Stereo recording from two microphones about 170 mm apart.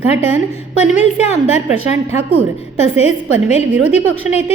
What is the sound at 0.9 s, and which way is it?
Speech, 40° left (ahead or behind).